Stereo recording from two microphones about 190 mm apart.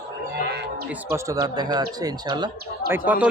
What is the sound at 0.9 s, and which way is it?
Speech, 15° right (ahead or behind).